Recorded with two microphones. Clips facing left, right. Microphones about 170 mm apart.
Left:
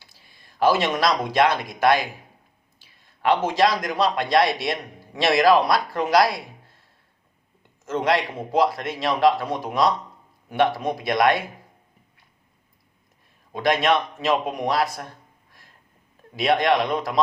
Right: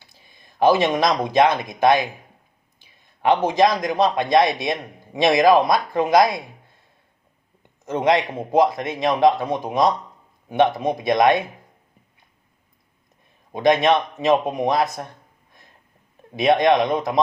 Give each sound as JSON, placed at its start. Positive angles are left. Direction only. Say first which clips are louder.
{"t": 0.0, "sound": "a man's voice", "louder": "right 2 dB", "side_deg": -20}
{"t": 7.9, "sound": "a man's voice", "louder": "right 3 dB", "side_deg": -20}
{"t": 13.5, "sound": "a man's voice", "louder": "right 4 dB", "side_deg": -20}
{"t": 16.3, "sound": "a man's voice", "louder": "right 4 dB", "side_deg": -20}